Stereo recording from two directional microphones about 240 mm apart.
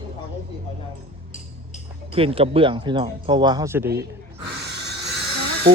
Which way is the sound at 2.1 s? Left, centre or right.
Right.